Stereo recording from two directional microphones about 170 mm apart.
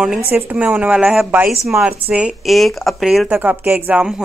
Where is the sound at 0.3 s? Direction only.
10° right (ahead or behind).